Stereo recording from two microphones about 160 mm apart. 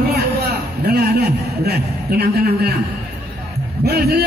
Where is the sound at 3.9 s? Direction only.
85° right.